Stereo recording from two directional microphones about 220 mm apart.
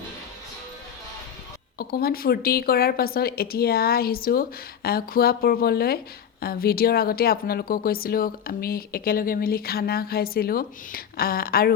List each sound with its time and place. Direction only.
1.8 s speech: 45° left (ahead or behind)